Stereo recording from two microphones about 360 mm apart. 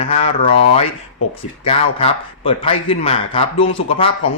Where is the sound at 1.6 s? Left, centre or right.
Centre.